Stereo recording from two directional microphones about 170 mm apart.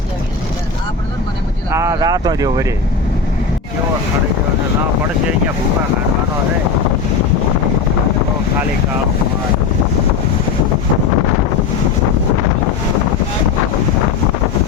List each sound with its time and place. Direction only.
1.7 s speech: 15° right (ahead or behind)